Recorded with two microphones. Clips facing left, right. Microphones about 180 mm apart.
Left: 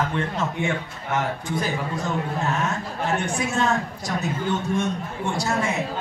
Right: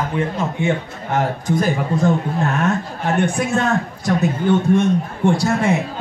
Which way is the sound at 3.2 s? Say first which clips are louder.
Right 5 dB; 55° right (ahead or behind).